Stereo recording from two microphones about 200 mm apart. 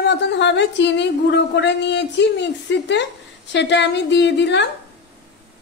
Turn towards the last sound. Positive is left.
turn(degrees=60)  # may be behind; listen again after turning